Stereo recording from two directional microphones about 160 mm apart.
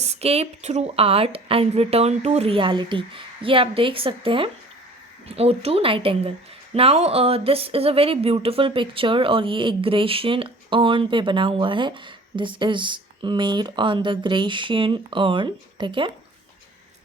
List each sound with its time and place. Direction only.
0.0 s speech: 40° right (ahead or behind)